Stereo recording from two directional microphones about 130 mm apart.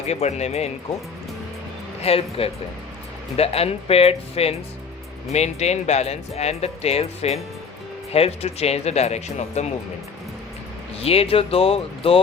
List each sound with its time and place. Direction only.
0.1 s speech: 60° left (ahead or behind)
2.0 s speech: 50° left (ahead or behind)
11.0 s speech: 50° left (ahead or behind)